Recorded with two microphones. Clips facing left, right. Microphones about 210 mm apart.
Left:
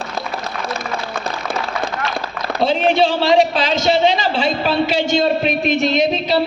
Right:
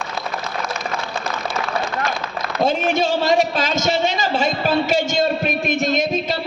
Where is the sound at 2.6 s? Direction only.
45° right (ahead or behind).